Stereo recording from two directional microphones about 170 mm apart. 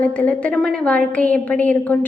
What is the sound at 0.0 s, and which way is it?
Speech, 10° left (ahead or behind).